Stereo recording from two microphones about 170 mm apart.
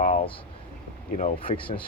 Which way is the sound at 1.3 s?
30° left (ahead or behind).